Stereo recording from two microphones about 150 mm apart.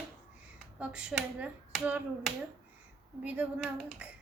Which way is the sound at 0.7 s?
5° right (ahead or behind).